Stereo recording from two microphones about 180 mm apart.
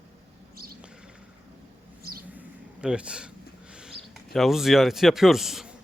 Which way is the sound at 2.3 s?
5° right (ahead or behind).